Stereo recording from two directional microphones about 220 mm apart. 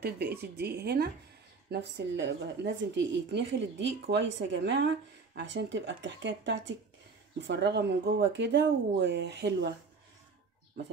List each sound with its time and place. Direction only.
0.0 s a woman's voice: 45° right (ahead or behind)